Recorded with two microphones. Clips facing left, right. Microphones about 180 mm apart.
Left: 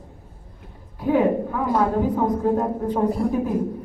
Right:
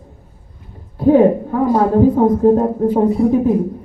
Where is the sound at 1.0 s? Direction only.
40° right (ahead or behind).